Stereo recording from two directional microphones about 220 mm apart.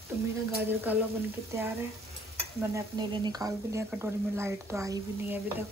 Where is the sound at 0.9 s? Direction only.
5° right (ahead or behind).